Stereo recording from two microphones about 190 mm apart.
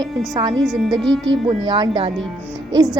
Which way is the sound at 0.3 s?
25° right (ahead or behind).